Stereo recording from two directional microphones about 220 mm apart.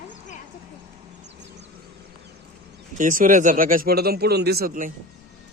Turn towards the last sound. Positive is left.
turn(degrees=-40)  # may be behind; listen again after turning